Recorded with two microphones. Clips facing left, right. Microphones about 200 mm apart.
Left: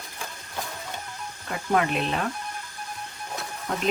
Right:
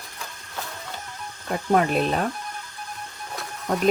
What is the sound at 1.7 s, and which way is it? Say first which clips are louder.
Speech: right 3 dB; 40° right (ahead or behind).